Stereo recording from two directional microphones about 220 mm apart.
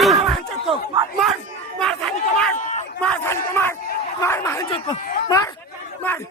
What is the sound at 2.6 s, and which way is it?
Crowd, 35° left (ahead or behind).